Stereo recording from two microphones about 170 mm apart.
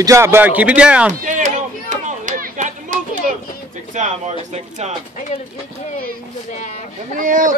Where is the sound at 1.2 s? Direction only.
50° right (ahead or behind).